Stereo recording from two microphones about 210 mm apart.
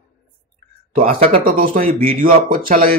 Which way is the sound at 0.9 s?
40° right (ahead or behind).